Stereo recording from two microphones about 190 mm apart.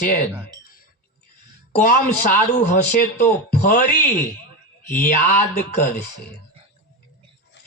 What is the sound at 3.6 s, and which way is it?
Speech, 45° left (ahead or behind).